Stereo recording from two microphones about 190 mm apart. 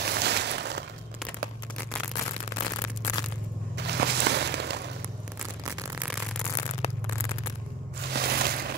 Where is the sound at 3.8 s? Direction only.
60° right (ahead or behind).